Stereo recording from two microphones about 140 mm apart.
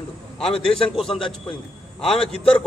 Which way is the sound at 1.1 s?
40° left (ahead or behind).